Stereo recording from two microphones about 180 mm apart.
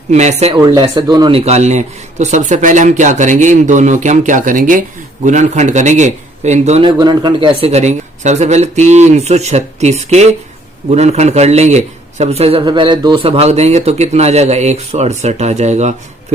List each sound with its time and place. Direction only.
0.1 s speech: 40° right (ahead or behind)
0.5 s speech: 25° right (ahead or behind)
7.0 s speech: 25° right (ahead or behind); by 16.0 s 40° right (ahead or behind)